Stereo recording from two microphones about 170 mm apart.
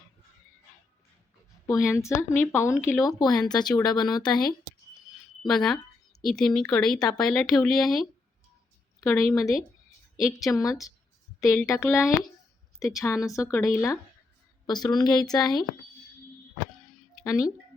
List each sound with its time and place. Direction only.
1.6 s a woman's voice: 15° left (ahead or behind)
5.4 s speech: 5° left (ahead or behind)
9.0 s a woman's voice: 20° left (ahead or behind)
17.2 s speech: 20° left (ahead or behind)